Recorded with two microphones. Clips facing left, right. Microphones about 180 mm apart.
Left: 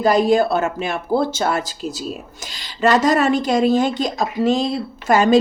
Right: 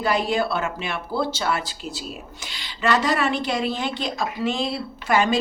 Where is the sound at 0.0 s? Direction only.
40° left (ahead or behind).